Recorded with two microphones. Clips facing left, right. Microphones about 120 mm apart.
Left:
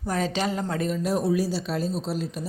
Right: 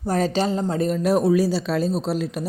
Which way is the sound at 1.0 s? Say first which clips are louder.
Right 7 dB; 70° right (ahead or behind).